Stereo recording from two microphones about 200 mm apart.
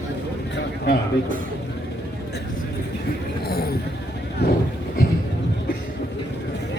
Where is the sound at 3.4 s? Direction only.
50° left (ahead or behind).